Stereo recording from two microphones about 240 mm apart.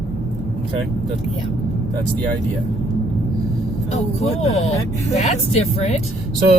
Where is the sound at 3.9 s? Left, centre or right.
Left.